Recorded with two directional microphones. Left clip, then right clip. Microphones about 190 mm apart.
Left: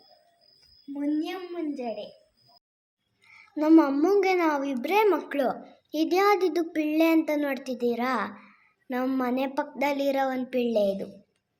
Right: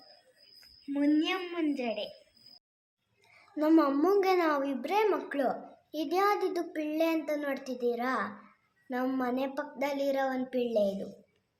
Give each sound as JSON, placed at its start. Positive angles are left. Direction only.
{"t": 0.9, "sound": "a woman's voice", "side_deg": -5}
{"t": 3.5, "sound": "a child's voice", "side_deg": 10}
{"t": 4.8, "sound": "a child's voice", "side_deg": 30}